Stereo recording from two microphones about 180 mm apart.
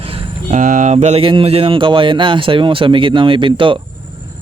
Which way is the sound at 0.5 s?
45° right (ahead or behind).